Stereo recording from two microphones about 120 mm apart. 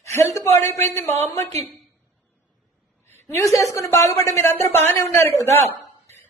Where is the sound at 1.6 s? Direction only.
Centre (ahead or behind).